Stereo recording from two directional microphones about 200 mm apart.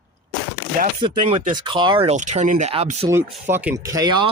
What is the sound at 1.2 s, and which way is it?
Speech, 20° right (ahead or behind).